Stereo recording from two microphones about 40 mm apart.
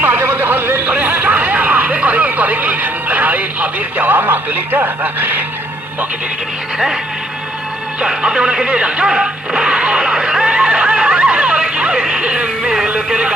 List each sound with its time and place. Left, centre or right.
0.0 s a sound: right
0.9 s music: right
8.0 s speech: centre
9.0 s music: centre
13.1 s speech: centre